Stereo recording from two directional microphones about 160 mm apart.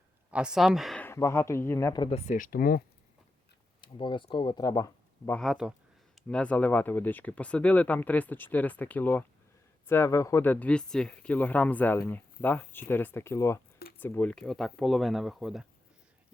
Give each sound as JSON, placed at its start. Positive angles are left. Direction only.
{"t": 0.3, "sound": "speech", "side_deg": -5}
{"t": 1.0, "sound": "speech", "side_deg": 15}
{"t": 2.0, "sound": "speech", "side_deg": 45}
{"t": 3.8, "sound": "speech", "side_deg": 30}
{"t": 5.3, "sound": "speech", "side_deg": 0}